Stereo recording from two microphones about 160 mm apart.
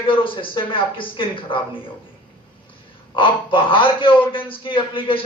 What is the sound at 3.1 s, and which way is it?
A man's voice, 30° left (ahead or behind).